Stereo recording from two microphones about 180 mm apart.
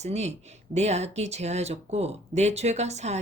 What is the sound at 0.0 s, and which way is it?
A woman's voice, 40° right (ahead or behind).